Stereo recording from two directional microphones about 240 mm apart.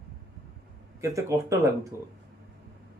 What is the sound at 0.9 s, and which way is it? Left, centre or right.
Speech, centre.